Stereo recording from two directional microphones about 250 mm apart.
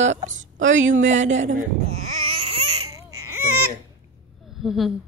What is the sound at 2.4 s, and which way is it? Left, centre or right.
Baby cry, right.